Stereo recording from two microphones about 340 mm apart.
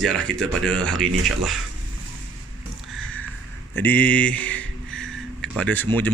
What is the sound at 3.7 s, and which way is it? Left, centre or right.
Speech, centre.